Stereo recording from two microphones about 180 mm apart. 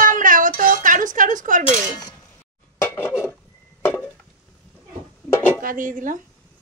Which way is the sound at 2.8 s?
10° left (ahead or behind).